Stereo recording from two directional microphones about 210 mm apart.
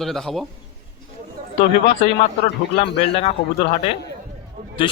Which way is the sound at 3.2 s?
30° left (ahead or behind).